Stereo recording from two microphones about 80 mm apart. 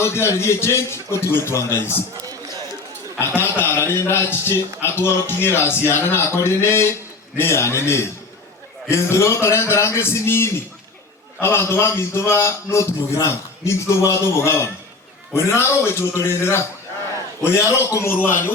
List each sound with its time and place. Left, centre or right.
0.0 s a man's voice: left
3.2 s a man's voice: left